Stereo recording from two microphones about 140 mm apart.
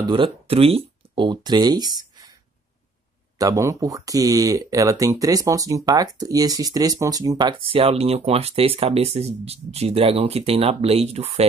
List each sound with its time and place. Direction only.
0.0 s speech: 35° right (ahead or behind)
3.3 s speech: 25° right (ahead or behind); by 11.4 s 45° right (ahead or behind)